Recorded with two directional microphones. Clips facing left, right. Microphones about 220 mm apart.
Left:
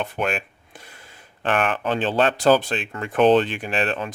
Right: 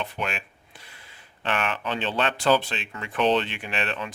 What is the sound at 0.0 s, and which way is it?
Speech, 50° left (ahead or behind).